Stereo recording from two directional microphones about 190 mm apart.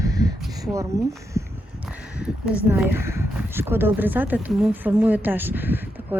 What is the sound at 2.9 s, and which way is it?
Speech, 15° right (ahead or behind).